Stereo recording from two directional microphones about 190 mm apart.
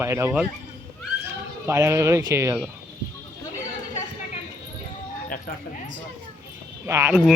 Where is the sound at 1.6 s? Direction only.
15° right (ahead or behind).